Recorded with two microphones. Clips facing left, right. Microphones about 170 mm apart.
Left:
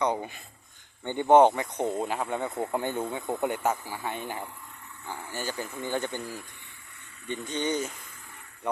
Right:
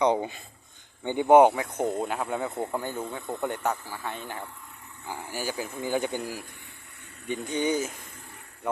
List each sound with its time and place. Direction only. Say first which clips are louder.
0.0 s speech: right 4 dB; 25° right (ahead or behind)
1.0 s speech: right 1 dB; 10° right (ahead or behind)
2.7 s speech: left 2 dB; 20° left (ahead or behind)
5.0 s speech: right 2 dB; 10° right (ahead or behind)